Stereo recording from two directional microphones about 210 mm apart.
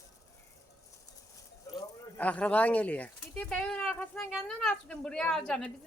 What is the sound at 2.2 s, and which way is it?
Speech, 5° left (ahead or behind).